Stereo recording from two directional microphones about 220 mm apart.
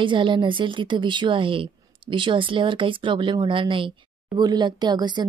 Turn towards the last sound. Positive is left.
turn(degrees=-20)  # may be behind; listen again after turning